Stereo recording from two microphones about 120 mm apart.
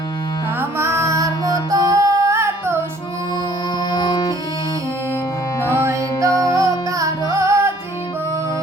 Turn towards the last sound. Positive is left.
turn(degrees=-25)  # may be behind; listen again after turning